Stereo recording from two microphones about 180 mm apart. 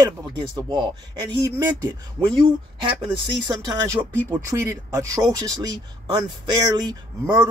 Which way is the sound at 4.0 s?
15° right (ahead or behind).